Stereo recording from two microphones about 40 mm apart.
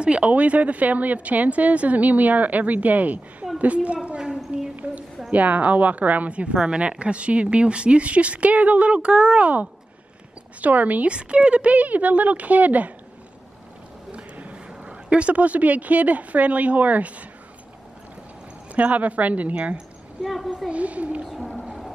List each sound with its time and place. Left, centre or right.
0.0 s a woman's voice: right
4.5 s a sound: right
5.3 s a woman's voice: right
11.1 s a woman's voice: right
14.5 s a woman's voice: right
18.8 s a woman's voice: right
20.2 s a woman's voice: centre
20.7 s a woman's voice: right
21.3 s a sound: centre